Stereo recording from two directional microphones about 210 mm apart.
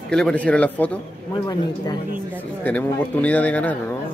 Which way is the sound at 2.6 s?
10° left (ahead or behind).